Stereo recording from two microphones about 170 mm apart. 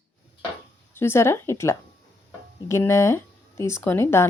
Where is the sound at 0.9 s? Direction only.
15° left (ahead or behind).